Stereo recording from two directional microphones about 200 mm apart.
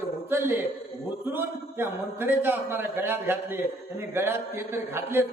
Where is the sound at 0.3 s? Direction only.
10° right (ahead or behind).